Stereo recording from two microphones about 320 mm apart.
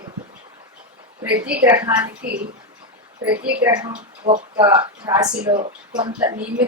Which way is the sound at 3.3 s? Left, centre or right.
Right.